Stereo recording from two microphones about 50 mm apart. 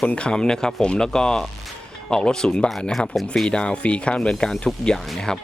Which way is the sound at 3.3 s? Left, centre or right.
Centre.